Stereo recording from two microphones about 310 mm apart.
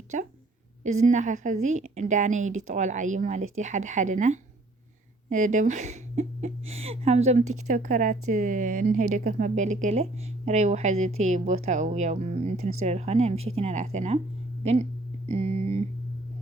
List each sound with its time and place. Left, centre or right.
0.1 s a woman's voice: right